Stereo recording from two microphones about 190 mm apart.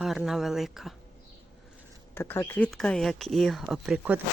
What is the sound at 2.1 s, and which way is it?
Speech, 10° left (ahead or behind).